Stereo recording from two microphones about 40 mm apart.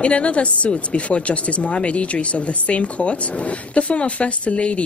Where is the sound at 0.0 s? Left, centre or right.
Left.